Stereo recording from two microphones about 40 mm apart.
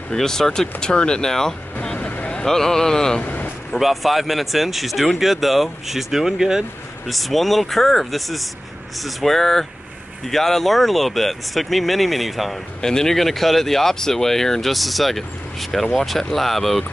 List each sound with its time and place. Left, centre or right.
0.1 s speech: centre
2.0 s vehicle: left
2.4 s speech: centre
3.2 s vehicle: left
3.8 s speech: centre
7.1 s speech: centre
12.8 s speech: centre